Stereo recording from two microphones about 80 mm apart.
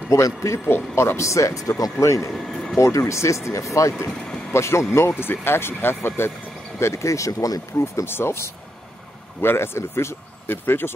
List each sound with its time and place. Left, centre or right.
0.1 s speech: left
0.7 s speech: left
2.3 s speech: centre
2.8 s speech: left